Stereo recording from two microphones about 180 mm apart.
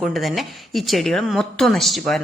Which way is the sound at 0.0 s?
Centre (ahead or behind).